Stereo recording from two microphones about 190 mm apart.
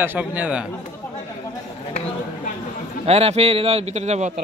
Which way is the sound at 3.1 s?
35° right (ahead or behind).